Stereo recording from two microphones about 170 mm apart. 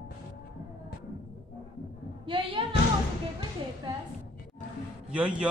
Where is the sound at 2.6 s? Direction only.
30° right (ahead or behind).